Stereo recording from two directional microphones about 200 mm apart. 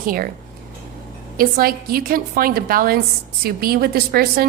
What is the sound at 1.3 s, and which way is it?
A woman's voice, 45° right (ahead or behind).